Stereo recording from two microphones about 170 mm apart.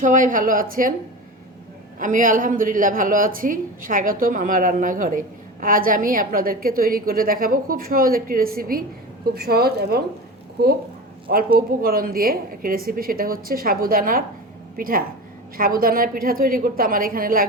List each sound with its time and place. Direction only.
0.0 s a woman's voice: 50° right (ahead or behind)
2.0 s a woman's voice: 50° right (ahead or behind); by 10.0 s 70° right (ahead or behind)
11.3 s a woman's voice: 60° right (ahead or behind)